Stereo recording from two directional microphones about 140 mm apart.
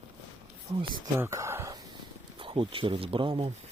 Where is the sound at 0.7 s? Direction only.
20° right (ahead or behind).